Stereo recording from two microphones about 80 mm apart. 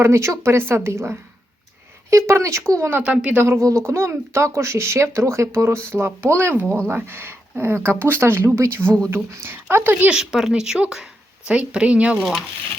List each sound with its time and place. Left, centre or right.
0.0 s speech: right
3.0 s a woman's voice: centre
3.4 s speech: right
10.1 s a woman's voice: centre